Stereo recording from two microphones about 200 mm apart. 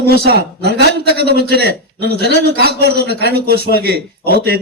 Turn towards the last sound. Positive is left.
turn(degrees=-50)  # may be behind; listen again after turning